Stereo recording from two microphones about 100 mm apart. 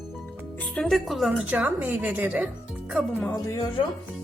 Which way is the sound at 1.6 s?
20° right (ahead or behind).